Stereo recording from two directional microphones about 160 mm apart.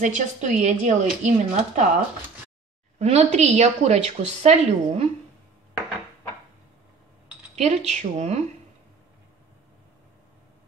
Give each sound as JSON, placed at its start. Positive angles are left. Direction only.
{"t": 0.0, "sound": "a woman's voice", "side_deg": -50}
{"t": 3.0, "sound": "a woman's voice", "side_deg": -45}
{"t": 7.5, "sound": "a woman's voice", "side_deg": -45}